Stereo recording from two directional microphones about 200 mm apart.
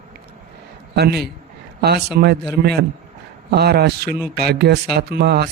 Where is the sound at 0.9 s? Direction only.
55° right (ahead or behind).